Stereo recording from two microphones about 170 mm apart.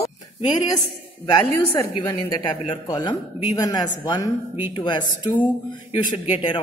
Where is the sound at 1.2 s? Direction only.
15° left (ahead or behind).